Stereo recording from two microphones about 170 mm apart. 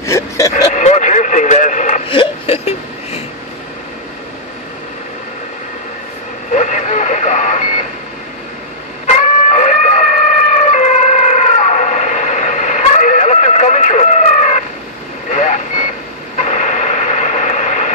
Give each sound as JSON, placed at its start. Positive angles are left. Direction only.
{"t": 0.0, "sound": "a sound", "side_deg": 15}
{"t": 0.7, "sound": "radio", "side_deg": 45}
{"t": 2.0, "sound": "whimper", "side_deg": 35}
{"t": 6.5, "sound": "radio", "side_deg": 45}
{"t": 9.0, "sound": "chicken", "side_deg": 40}
{"t": 15.3, "sound": "radio", "side_deg": 45}